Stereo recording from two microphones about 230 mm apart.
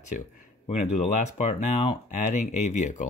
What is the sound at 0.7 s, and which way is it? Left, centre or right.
Speech, left.